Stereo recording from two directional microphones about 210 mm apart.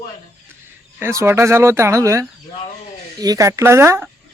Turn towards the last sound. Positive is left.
turn(degrees=-10)  # may be behind; listen again after turning